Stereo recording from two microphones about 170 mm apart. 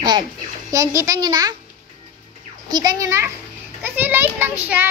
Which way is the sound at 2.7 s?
20° right (ahead or behind).